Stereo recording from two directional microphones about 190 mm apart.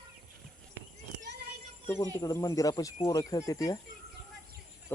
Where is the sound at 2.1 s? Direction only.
15° left (ahead or behind).